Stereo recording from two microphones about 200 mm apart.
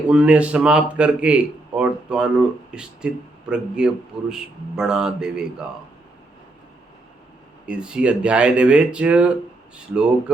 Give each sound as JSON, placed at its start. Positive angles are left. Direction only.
{"t": 0.1, "sound": "a man's voice", "side_deg": -5}
{"t": 7.7, "sound": "a man's voice", "side_deg": -5}